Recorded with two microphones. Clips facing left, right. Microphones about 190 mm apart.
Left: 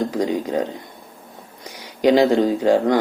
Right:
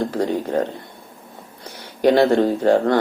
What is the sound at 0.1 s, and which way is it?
Speech, 15° left (ahead or behind).